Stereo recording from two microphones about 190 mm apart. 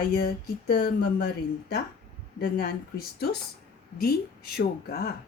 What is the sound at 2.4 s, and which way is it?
Speech, 50° left (ahead or behind).